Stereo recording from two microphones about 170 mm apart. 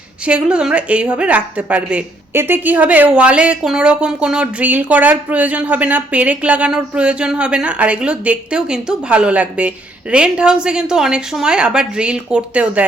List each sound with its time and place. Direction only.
0.3 s speech: 5° right (ahead or behind)